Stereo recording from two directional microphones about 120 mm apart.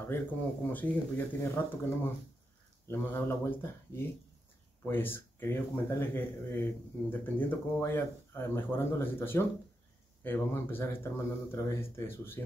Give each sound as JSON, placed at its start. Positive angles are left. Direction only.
{"t": 0.1, "sound": "speech", "side_deg": 15}
{"t": 2.9, "sound": "a man's voice", "side_deg": 20}